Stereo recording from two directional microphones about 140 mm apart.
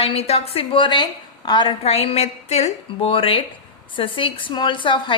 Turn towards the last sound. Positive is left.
turn(degrees=35)  # may be behind; listen again after turning